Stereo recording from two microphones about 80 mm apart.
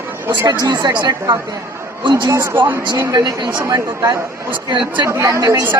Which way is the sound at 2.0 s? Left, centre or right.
Right.